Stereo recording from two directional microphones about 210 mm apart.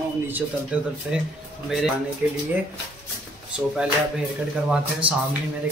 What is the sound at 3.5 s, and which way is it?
A man's voice, 5° right (ahead or behind).